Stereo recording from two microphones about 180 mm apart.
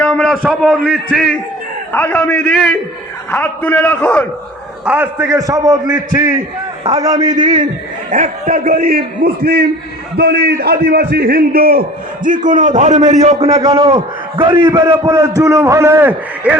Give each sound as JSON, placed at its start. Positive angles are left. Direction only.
{"t": 0.0, "sound": "a sound", "side_deg": 5}
{"t": 0.4, "sound": "a man's voice", "side_deg": 0}
{"t": 4.9, "sound": "a man's voice", "side_deg": -10}
{"t": 8.1, "sound": "a man's voice", "side_deg": -45}
{"t": 13.7, "sound": "a man's voice", "side_deg": -30}